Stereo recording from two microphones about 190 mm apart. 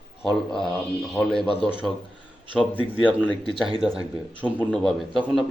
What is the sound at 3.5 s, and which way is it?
Speech, 30° right (ahead or behind).